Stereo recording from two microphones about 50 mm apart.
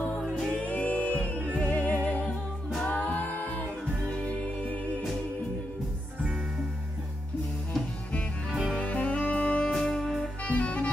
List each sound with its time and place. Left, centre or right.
0.6 s music: left
4.1 s music: left
8.7 s music: left
9.7 s music: centre
10.4 s music: left